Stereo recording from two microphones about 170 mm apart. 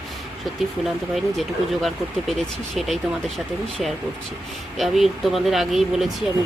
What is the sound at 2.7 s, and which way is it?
Speech, centre (ahead or behind).